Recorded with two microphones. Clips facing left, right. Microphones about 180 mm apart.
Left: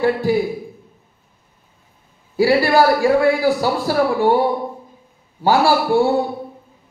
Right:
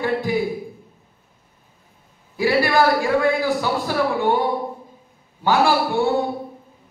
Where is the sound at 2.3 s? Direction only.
35° left (ahead or behind).